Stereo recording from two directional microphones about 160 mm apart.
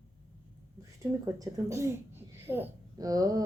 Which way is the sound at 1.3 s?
15° right (ahead or behind).